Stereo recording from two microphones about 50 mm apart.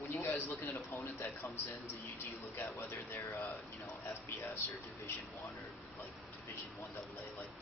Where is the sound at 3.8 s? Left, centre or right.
Left.